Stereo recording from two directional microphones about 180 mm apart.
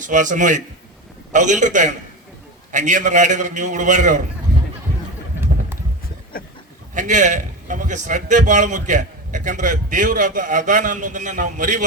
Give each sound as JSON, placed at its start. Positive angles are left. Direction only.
{"t": 0.0, "sound": "a man's voice", "side_deg": -45}
{"t": 6.3, "sound": "goat", "side_deg": 55}
{"t": 6.9, "sound": "a man's voice", "side_deg": -45}